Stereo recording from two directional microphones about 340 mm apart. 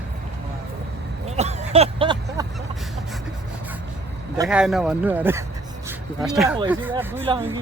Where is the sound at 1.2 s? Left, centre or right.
Centre.